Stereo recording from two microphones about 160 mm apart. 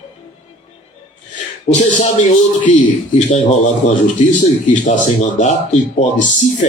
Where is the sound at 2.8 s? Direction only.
50° left (ahead or behind).